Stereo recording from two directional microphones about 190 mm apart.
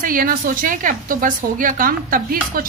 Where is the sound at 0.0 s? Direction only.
45° right (ahead or behind).